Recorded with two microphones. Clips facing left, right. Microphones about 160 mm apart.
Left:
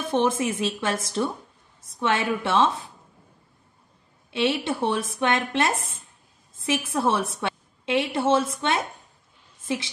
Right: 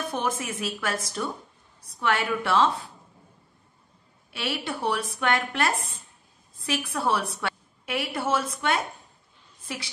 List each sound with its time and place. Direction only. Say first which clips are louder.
0.0 s speech: left 6 dB; 25° left (ahead or behind)
4.3 s a woman's voice: left 7 dB; 25° left (ahead or behind)
9.6 s a sound: left 8 dB; 25° left (ahead or behind)